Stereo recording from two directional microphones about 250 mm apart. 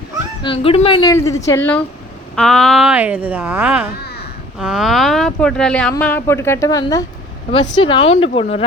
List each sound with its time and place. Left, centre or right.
0.4 s a woman's voice: left